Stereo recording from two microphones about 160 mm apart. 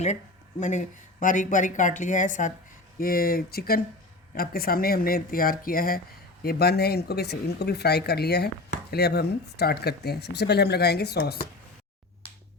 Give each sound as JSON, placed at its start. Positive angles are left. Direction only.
{"t": 0.6, "sound": "a woman's voice", "side_deg": 50}
{"t": 3.0, "sound": "speech", "side_deg": 70}
{"t": 6.4, "sound": "speech", "side_deg": 80}